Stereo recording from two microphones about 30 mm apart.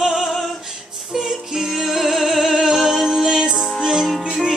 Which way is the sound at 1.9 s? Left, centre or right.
Centre.